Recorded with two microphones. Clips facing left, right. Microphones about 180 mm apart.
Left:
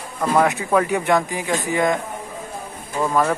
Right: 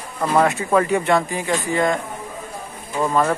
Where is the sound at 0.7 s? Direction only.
5° left (ahead or behind).